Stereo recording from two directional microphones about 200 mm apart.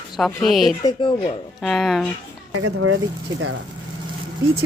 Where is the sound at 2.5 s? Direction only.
90° right.